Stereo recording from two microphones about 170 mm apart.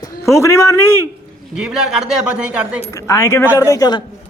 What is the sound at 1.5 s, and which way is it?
Speech, 5° right (ahead or behind).